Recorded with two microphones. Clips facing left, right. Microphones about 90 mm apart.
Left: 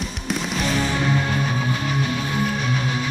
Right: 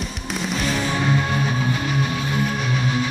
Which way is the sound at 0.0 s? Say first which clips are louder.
Left 1 dB; centre (ahead or behind).